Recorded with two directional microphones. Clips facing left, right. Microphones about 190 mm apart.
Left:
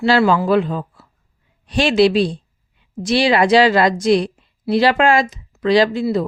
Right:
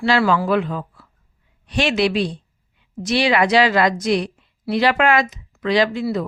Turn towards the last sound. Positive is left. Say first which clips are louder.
# left 4 dB
turn(degrees=35)  # may be behind; listen again after turning